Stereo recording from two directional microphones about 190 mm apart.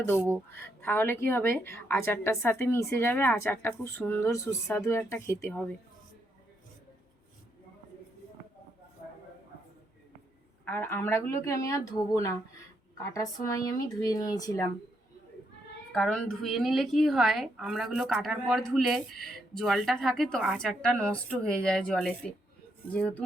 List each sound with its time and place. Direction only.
0.5 s a woman's voice: 10° left (ahead or behind)
10.7 s a woman's voice: 10° left (ahead or behind)
15.9 s a woman's voice: 5° left (ahead or behind)